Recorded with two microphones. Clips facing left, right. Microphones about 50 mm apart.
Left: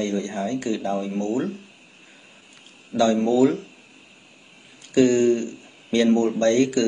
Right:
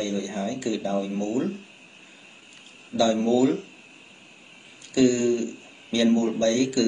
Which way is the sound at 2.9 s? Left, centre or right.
Left.